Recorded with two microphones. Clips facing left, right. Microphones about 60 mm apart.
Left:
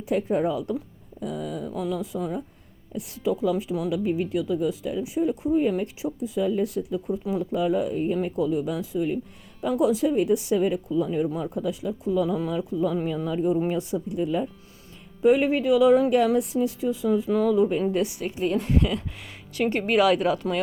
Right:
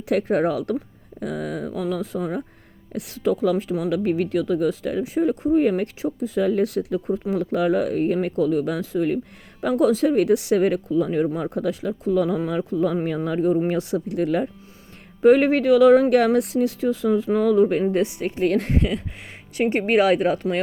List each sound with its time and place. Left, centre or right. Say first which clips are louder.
0.1 s speech: right 3 dB; right
2.9 s speech: right 4 dB; right
5.5 s speech: right 4 dB; right
13.7 s speech: right 3 dB; right
15.2 s speech: right 4 dB; right
17.9 s speech: right 4 dB; right
18.3 s speech: right 5 dB; right
18.7 s speech: right 1 dB; right